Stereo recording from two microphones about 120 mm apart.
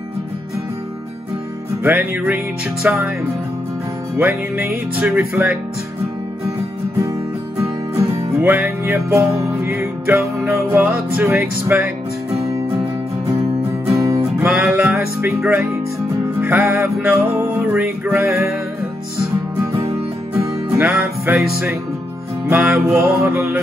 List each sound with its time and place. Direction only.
1.8 s music: 15° right (ahead or behind)
4.2 s music: 20° right (ahead or behind)
7.5 s music: 25° right (ahead or behind)
13.4 s music: 25° right (ahead or behind)
14.5 s music: centre (ahead or behind)
15.0 s speech: 20° right (ahead or behind)
16.3 s music: 15° right (ahead or behind)
20.7 s music: 20° right (ahead or behind)
22.6 s music: 5° right (ahead or behind)
23.0 s music: 15° right (ahead or behind)